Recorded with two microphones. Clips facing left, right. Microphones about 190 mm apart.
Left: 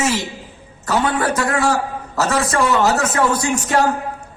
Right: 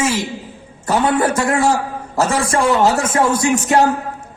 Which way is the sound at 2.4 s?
30° right (ahead or behind).